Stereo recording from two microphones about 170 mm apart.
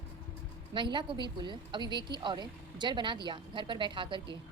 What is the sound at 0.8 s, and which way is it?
A woman's voice, 25° right (ahead or behind).